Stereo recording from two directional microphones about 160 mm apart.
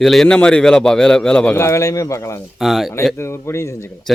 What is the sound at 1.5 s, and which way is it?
Speech, 20° left (ahead or behind).